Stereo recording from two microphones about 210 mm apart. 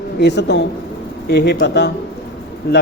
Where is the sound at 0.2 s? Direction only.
55° left (ahead or behind).